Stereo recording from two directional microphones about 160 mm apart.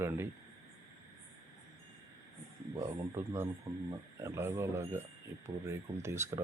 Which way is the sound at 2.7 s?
20° right (ahead or behind).